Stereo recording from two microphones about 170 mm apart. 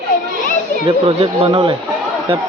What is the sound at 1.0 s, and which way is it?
Speech, 35° right (ahead or behind).